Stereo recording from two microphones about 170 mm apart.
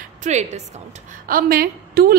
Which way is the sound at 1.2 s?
60° right (ahead or behind).